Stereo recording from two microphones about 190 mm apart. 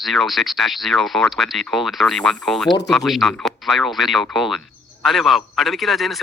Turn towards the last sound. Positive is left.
turn(degrees=0)  # may be behind; listen again after turning